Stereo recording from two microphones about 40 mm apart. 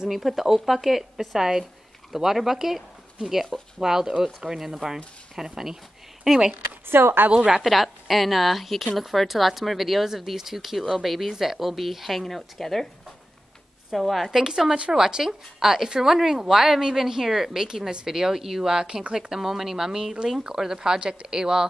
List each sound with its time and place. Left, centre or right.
0.1 s a woman's voice: centre
3.2 s a woman's voice: right
6.9 s a woman's voice: right
7.2 s a woman's voice: right
7.6 s speech: centre
13.9 s speech: centre
14.3 s a woman's voice: centre